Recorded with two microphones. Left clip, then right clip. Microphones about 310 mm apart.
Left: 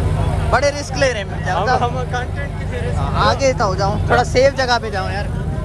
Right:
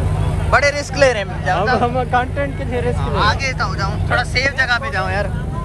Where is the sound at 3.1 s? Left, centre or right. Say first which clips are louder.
Left 3 dB; centre.